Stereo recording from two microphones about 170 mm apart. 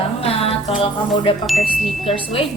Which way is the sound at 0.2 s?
35° left (ahead or behind).